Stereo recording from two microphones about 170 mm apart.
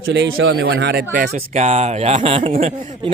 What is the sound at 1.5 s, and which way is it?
Speech, 40° right (ahead or behind).